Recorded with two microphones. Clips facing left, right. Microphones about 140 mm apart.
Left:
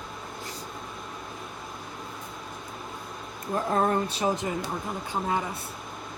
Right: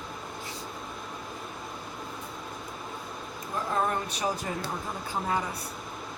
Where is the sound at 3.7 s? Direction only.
30° left (ahead or behind).